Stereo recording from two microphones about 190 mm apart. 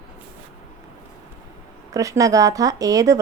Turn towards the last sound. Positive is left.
turn(degrees=-20)  # may be behind; listen again after turning